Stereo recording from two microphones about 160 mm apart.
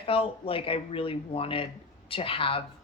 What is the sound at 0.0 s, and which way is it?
Speech, 35° left (ahead or behind).